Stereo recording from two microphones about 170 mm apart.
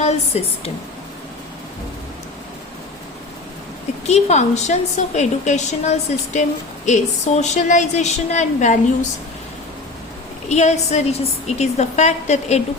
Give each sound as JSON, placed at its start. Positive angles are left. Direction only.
{"t": 0.0, "sound": "a woman's voice", "side_deg": 40}
{"t": 4.0, "sound": "a woman's voice", "side_deg": 40}
{"t": 10.5, "sound": "a woman's voice", "side_deg": 40}